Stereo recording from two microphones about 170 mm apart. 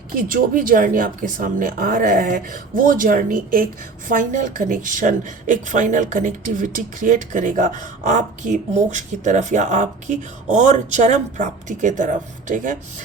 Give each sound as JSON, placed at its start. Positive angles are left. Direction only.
{"t": 0.1, "sound": "a woman's voice", "side_deg": -55}